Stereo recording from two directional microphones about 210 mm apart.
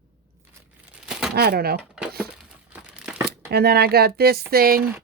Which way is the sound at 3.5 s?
50° right (ahead or behind).